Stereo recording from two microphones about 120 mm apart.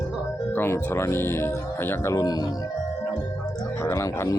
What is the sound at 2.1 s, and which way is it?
Speech, 30° left (ahead or behind).